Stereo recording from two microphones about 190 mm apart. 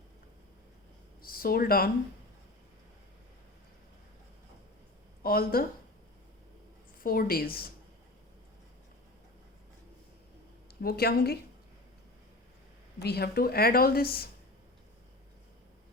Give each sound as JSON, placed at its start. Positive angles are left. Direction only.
{"t": 1.2, "sound": "speech", "side_deg": 50}
{"t": 5.2, "sound": "speech", "side_deg": 50}
{"t": 7.0, "sound": "speech", "side_deg": 50}
{"t": 10.8, "sound": "a woman's voice", "side_deg": 55}
{"t": 13.0, "sound": "speech", "side_deg": 55}